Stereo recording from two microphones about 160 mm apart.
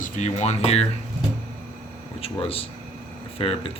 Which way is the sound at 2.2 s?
35° left (ahead or behind).